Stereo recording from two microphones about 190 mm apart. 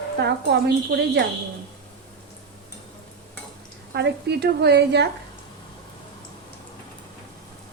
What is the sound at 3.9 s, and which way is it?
Speech, 60° right (ahead or behind).